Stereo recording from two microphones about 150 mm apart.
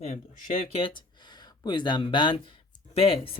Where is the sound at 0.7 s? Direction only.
35° left (ahead or behind).